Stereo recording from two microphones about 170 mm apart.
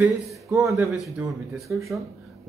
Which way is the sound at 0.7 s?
Centre (ahead or behind).